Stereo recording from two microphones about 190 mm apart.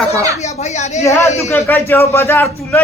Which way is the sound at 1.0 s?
15° left (ahead or behind).